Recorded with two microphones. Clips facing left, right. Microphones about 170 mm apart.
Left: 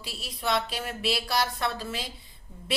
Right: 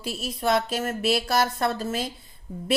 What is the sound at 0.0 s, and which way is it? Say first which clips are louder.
A woman's voice: right 6 dB; 50° right (ahead or behind).